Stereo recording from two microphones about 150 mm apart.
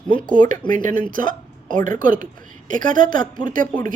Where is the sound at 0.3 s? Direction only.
65° right (ahead or behind).